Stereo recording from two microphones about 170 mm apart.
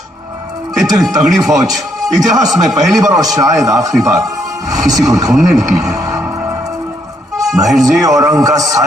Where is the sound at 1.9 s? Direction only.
20° right (ahead or behind).